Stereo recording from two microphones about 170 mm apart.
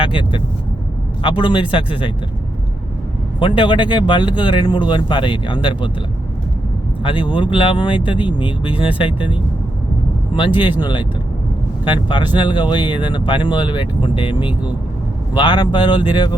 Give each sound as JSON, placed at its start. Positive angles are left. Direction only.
{"t": 0.0, "sound": "vehicle", "side_deg": 30}
{"t": 1.2, "sound": "speech", "side_deg": 30}
{"t": 3.4, "sound": "speech", "side_deg": 30}
{"t": 7.0, "sound": "a man's voice", "side_deg": 30}
{"t": 10.3, "sound": "speech", "side_deg": 30}